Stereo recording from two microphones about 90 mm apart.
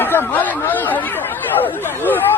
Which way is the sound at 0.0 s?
20° left (ahead or behind).